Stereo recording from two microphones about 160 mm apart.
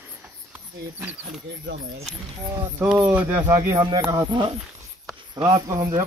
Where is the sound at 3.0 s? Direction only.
10° right (ahead or behind).